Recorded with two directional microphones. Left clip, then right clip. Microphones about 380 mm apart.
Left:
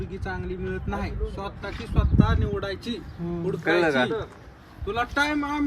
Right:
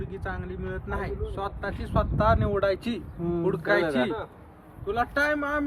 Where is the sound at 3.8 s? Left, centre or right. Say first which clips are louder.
Left 4 dB; centre.